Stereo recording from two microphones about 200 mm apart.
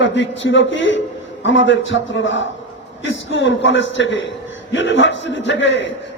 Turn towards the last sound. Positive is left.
turn(degrees=65)  # may be behind; listen again after turning